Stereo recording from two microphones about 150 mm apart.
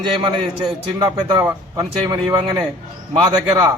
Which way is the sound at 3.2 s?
30° right (ahead or behind).